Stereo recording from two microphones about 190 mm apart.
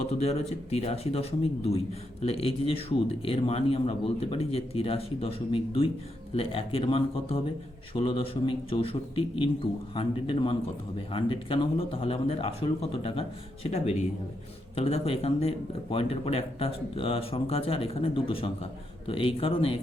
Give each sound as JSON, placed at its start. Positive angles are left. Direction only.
{"t": 0.1, "sound": "speech", "side_deg": 35}